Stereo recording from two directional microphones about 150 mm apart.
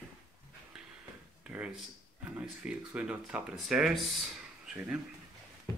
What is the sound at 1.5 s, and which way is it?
Speech, 10° right (ahead or behind).